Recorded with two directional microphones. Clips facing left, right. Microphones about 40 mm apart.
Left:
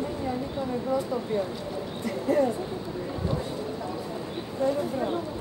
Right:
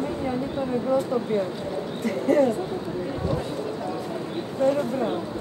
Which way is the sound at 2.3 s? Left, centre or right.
Right.